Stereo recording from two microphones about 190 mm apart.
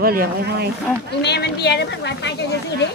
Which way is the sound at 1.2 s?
60° left (ahead or behind).